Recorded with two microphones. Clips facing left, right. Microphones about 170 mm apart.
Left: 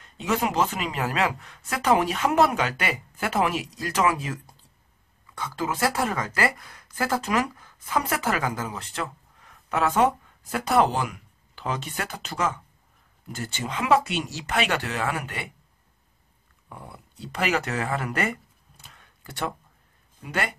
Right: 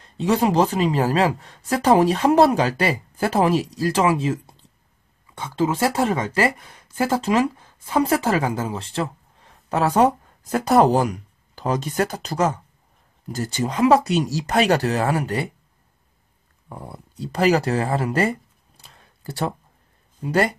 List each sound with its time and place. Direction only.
0.0 s speech: 35° right (ahead or behind)
16.6 s speech: 35° right (ahead or behind)